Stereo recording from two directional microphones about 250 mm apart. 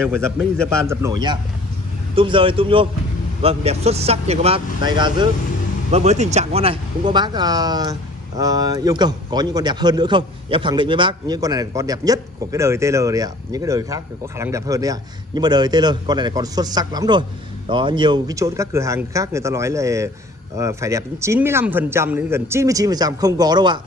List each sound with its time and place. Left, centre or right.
0.0 s a man's voice: centre
0.8 s speech: centre